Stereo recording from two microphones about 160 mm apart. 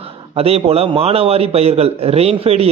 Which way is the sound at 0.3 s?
40° right (ahead or behind).